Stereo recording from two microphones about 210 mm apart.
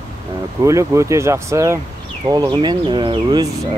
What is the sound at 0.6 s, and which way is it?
Speech, 15° right (ahead or behind).